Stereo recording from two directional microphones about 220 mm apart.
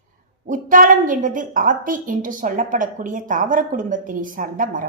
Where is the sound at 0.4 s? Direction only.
35° right (ahead or behind).